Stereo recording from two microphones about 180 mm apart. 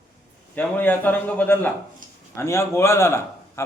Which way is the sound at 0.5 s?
10° left (ahead or behind).